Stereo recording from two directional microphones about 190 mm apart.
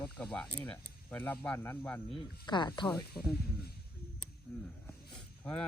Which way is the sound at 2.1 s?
25° left (ahead or behind).